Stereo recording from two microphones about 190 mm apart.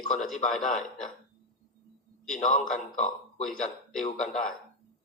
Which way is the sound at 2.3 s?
40° left (ahead or behind).